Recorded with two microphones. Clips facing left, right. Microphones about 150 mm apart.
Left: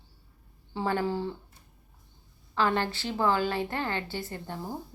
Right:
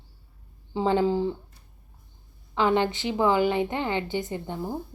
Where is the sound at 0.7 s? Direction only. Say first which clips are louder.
Right 6 dB; 15° right (ahead or behind).